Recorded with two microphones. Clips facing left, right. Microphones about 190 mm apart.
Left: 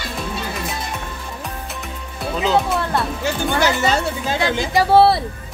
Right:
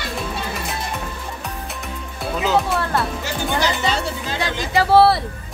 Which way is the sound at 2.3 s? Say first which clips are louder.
Left 1 dB; centre (ahead or behind).